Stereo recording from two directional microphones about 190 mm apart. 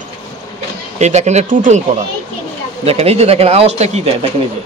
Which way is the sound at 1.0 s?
35° right (ahead or behind).